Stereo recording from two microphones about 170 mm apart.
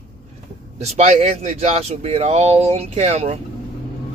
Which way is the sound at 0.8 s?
40° right (ahead or behind).